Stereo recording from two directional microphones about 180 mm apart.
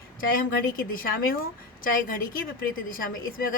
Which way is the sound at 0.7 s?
50° left (ahead or behind).